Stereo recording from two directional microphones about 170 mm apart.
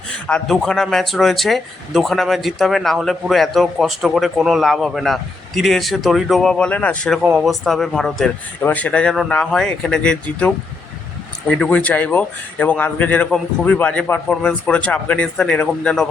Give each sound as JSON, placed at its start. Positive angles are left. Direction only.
{"t": 0.3, "sound": "a man's voice", "side_deg": 5}